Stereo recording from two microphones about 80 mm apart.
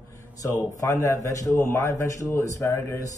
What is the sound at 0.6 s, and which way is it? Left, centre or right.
A man's voice, left.